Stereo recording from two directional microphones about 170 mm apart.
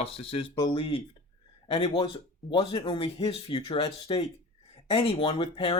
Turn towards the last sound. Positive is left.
turn(degrees=30)  # may be behind; listen again after turning